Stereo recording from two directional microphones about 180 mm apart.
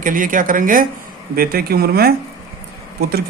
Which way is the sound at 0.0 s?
50° right (ahead or behind).